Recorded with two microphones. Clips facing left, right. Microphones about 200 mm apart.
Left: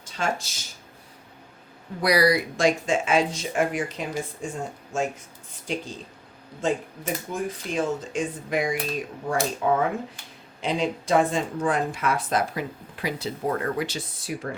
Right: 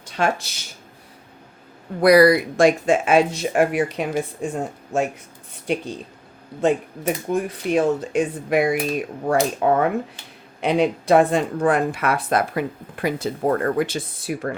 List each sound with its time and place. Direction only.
0.0 s speech: 65° right (ahead or behind)
2.0 s speech: 55° right (ahead or behind)